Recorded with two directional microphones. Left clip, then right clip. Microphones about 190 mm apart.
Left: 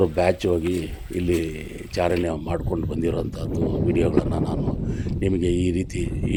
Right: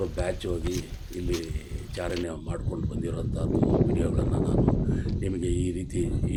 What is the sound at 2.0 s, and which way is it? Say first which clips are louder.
Speech: left 9 dB; 40° left (ahead or behind).